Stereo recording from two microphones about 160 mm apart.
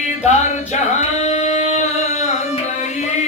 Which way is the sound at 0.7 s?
45° left (ahead or behind).